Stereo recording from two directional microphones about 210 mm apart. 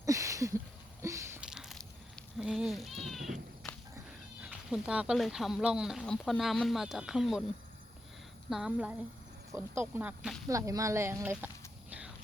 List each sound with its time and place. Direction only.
0.0 s a sound: 15° right (ahead or behind); by 3.8 s centre (ahead or behind)
4.4 s speech: 5° right (ahead or behind)
8.4 s speech: centre (ahead or behind)
10.5 s speech: 15° right (ahead or behind)